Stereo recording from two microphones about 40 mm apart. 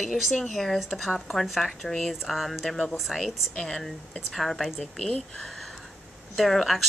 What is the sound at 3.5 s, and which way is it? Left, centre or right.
Speech, centre.